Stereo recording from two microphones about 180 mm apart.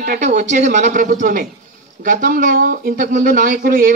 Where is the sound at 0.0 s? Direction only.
45° right (ahead or behind).